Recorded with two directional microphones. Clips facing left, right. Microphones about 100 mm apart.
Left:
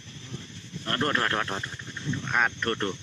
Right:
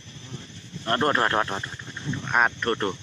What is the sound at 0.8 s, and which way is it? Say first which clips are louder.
Speech: right 5 dB; 25° right (ahead or behind).